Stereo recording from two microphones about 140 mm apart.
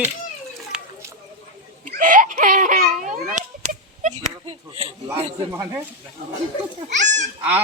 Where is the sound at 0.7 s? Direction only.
5° right (ahead or behind).